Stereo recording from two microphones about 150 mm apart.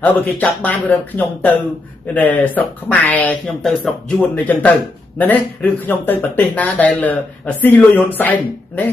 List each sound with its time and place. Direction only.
0.0 s speech: 10° left (ahead or behind)